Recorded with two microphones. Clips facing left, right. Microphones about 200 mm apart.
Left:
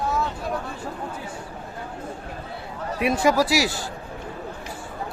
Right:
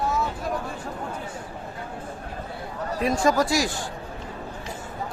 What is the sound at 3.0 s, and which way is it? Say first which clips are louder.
Speech: left 2 dB; 15° left (ahead or behind).